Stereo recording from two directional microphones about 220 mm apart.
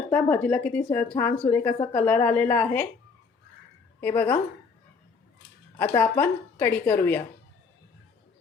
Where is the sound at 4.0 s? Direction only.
10° left (ahead or behind).